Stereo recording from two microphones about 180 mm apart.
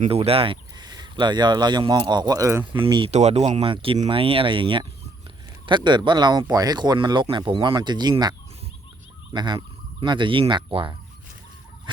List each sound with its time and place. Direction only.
0.1 s speech: 30° right (ahead or behind); by 2.6 s 15° right (ahead or behind)
2.7 s speech: 30° right (ahead or behind)